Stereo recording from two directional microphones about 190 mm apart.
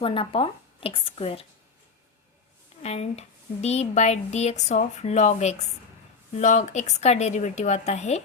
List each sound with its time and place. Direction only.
0.0 s a woman's voice: 30° left (ahead or behind)
2.8 s speech: 35° left (ahead or behind)